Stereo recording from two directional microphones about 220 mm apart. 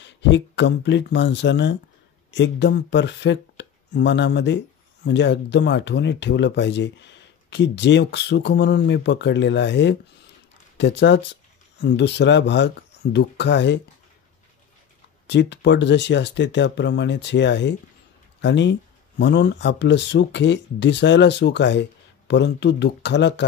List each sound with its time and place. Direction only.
0.0 s speech: 55° left (ahead or behind)
15.2 s speech: 50° left (ahead or behind)